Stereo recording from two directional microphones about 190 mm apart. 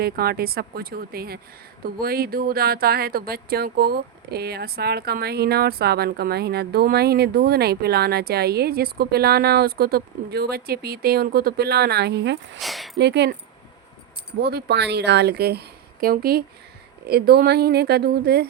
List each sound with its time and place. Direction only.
0.0 s speech: 55° right (ahead or behind)
12.5 s speech: centre (ahead or behind)
13.0 s speech: 60° right (ahead or behind)
14.4 s speech: 60° right (ahead or behind)